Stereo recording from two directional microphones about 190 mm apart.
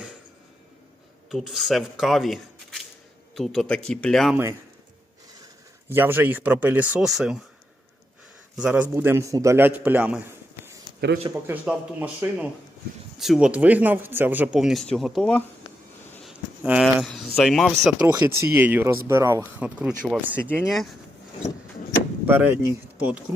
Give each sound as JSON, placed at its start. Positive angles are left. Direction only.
{"t": 1.3, "sound": "speech", "side_deg": 0}
{"t": 5.9, "sound": "a man's voice", "side_deg": -10}
{"t": 8.5, "sound": "a man's voice", "side_deg": -5}
{"t": 11.4, "sound": "a man's voice", "side_deg": -10}
{"t": 16.6, "sound": "speech", "side_deg": -5}
{"t": 18.0, "sound": "a man's voice", "side_deg": -20}
{"t": 22.3, "sound": "a man's voice", "side_deg": -10}